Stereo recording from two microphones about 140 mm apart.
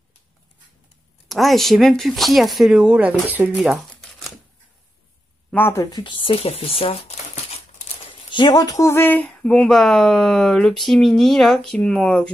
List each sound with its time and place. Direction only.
1.3 s speech: centre (ahead or behind)
5.5 s speech: 15° left (ahead or behind); by 7.6 s 45° left (ahead or behind)
8.3 s speech: 30° left (ahead or behind); by 12.3 s 5° left (ahead or behind)